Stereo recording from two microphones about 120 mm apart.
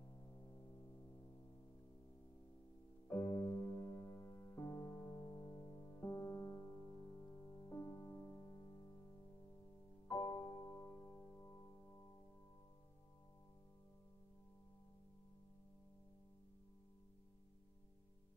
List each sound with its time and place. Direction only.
0.2 s music: 25° left (ahead or behind)
3.2 s music: 30° left (ahead or behind)
8.2 s music: 20° left (ahead or behind)
10.1 s music: 30° left (ahead or behind)
10.9 s music: 5° left (ahead or behind)
11.3 s music: 25° left (ahead or behind)